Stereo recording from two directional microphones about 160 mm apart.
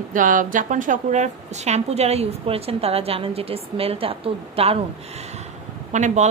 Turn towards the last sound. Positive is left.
turn(degrees=-50)  # may be behind; listen again after turning